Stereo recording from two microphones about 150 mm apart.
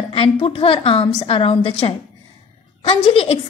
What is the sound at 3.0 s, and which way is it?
Speech, 40° left (ahead or behind).